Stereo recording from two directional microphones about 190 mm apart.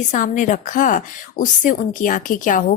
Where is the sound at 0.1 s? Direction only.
40° left (ahead or behind).